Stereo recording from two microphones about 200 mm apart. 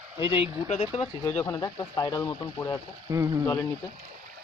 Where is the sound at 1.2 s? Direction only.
10° left (ahead or behind).